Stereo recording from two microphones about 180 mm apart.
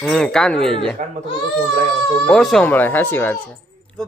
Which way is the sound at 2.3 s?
Centre (ahead or behind).